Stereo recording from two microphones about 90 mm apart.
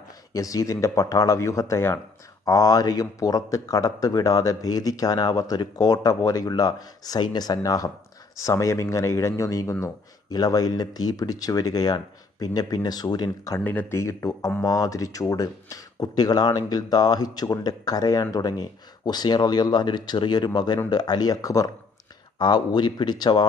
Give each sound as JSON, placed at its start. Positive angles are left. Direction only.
{"t": 0.3, "sound": "speech", "side_deg": 40}
{"t": 2.4, "sound": "speech", "side_deg": 40}
{"t": 10.3, "sound": "speech", "side_deg": 45}
{"t": 13.7, "sound": "speech", "side_deg": 20}
{"t": 13.9, "sound": "speech", "side_deg": 35}
{"t": 22.4, "sound": "speech", "side_deg": 55}